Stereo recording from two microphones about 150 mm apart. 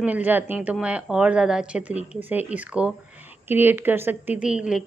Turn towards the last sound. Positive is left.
turn(degrees=-5)  # may be behind; listen again after turning